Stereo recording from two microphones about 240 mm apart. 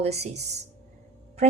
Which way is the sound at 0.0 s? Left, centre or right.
Right.